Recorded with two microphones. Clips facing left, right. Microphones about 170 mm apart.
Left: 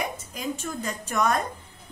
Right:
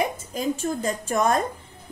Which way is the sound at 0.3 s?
45° right (ahead or behind).